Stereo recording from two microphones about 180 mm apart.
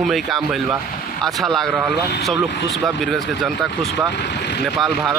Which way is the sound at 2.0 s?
70° left (ahead or behind).